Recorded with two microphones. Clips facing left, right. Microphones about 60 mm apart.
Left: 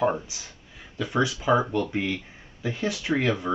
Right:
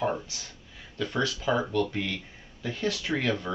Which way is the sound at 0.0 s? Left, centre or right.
Centre.